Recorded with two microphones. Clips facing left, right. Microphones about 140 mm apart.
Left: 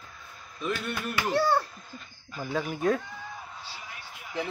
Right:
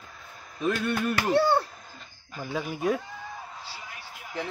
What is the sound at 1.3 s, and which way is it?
Speech, 30° right (ahead or behind).